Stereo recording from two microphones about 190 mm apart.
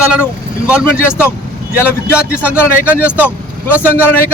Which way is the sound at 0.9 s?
10° left (ahead or behind).